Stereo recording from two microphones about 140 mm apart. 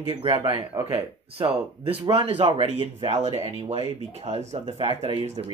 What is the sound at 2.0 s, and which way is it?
Speech, 40° right (ahead or behind).